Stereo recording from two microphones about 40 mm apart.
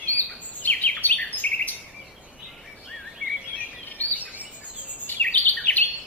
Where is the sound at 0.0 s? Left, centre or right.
Left.